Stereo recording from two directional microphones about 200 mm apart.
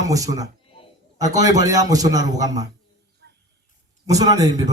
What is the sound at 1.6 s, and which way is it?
A man's voice, 20° right (ahead or behind).